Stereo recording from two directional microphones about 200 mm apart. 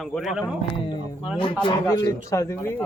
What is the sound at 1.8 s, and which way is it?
Speech, 20° left (ahead or behind).